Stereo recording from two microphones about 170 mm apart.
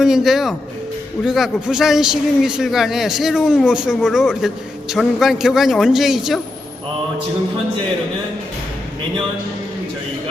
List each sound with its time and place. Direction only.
0.0 s speech: centre (ahead or behind)